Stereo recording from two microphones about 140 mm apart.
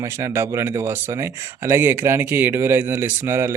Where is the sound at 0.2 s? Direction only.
20° right (ahead or behind).